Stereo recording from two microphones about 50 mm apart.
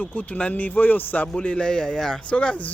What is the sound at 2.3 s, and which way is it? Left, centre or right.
Speech, left.